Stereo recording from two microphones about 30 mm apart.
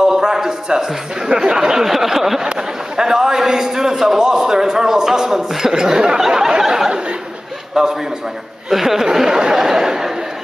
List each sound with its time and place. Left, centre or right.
0.0 s a sound: centre
1.4 s speech: right
3.0 s a man's voice: right